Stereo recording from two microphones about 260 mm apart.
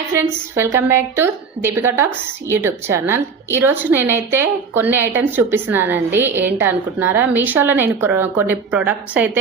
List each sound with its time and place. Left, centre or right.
0.1 s a woman's voice: centre